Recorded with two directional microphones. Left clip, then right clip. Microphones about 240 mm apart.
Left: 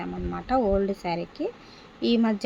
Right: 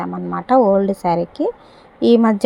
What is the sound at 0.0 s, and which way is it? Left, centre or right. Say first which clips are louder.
A woman's voice: right 9 dB; centre.